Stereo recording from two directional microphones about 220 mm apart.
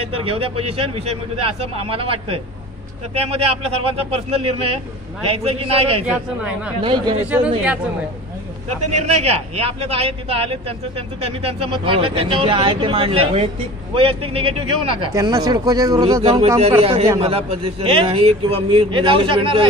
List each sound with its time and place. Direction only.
0.0 s speech: 25° right (ahead or behind)
6.0 s speech: 5° right (ahead or behind)
6.8 s speech: 20° right (ahead or behind)
7.2 s speech: 5° right (ahead or behind)
9.2 s speech: 25° right (ahead or behind)